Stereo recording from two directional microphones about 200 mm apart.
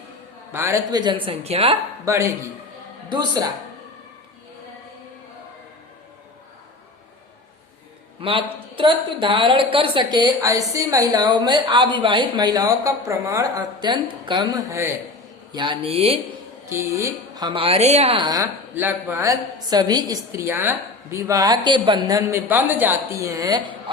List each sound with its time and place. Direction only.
0.5 s a woman's voice: 15° right (ahead or behind)
2.0 s a woman's voice: 15° right (ahead or behind)
8.2 s a woman's voice: 25° right (ahead or behind)
15.5 s a woman's voice: 25° right (ahead or behind)
16.6 s speech: 15° right (ahead or behind)